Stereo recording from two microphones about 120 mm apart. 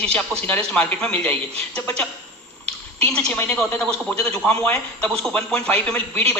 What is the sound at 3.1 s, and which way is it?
A man's voice, 10° left (ahead or behind).